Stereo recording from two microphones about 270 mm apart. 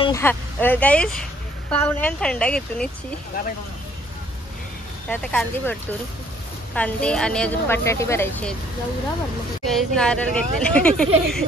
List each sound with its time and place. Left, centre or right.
0.0 s a woman's voice: centre
3.3 s speech: left
5.1 s a woman's voice: centre
9.7 s a woman's voice: centre